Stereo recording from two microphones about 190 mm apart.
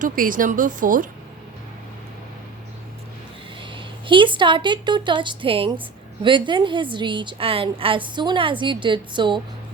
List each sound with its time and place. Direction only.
0.0 s speech: 45° right (ahead or behind)
3.6 s a woman's voice: 25° right (ahead or behind)